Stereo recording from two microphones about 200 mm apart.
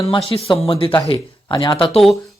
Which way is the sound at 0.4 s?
30° left (ahead or behind).